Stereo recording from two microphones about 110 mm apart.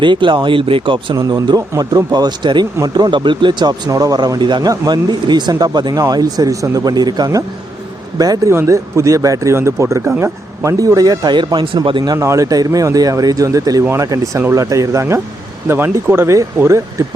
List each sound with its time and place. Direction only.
0.0 s speech: 45° right (ahead or behind)
1.1 s speech: 35° right (ahead or behind)
12.1 s speech: 30° right (ahead or behind)